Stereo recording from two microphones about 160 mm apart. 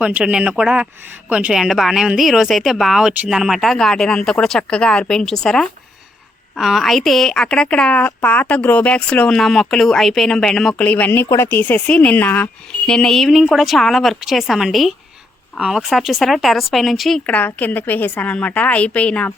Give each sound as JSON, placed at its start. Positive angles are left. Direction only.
{"t": 0.0, "sound": "a woman's voice", "side_deg": -10}